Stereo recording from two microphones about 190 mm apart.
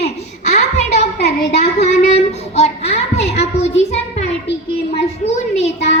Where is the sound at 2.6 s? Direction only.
35° left (ahead or behind).